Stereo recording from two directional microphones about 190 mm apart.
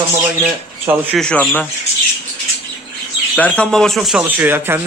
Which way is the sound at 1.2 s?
5° left (ahead or behind).